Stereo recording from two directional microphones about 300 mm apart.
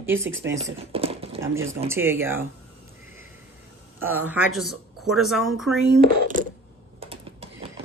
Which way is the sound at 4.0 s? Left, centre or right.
Centre.